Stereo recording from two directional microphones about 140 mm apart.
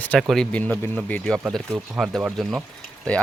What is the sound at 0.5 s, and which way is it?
Speech, 10° left (ahead or behind).